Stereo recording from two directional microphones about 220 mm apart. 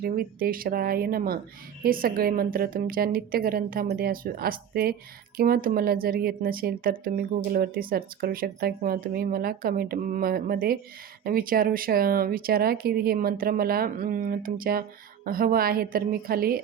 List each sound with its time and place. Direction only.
0.0 s speech: 40° right (ahead or behind)